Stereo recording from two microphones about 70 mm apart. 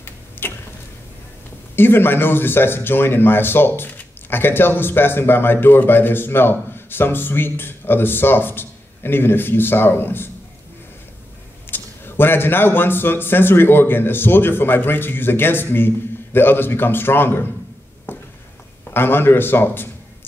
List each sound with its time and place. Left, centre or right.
0.4 s tick-tock: left
1.8 s speech: left
11.7 s speech: left
18.1 s a sound: left
18.9 s speech: left